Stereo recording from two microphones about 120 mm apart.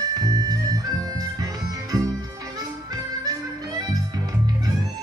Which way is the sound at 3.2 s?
30° right (ahead or behind).